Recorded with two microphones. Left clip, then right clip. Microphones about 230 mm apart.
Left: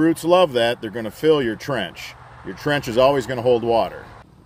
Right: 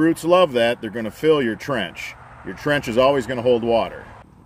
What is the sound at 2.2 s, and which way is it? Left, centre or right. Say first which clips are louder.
Vehicle: right 1 dB; left.